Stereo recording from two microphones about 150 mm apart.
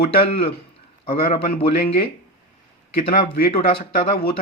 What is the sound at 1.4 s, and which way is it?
Speech, 80° left.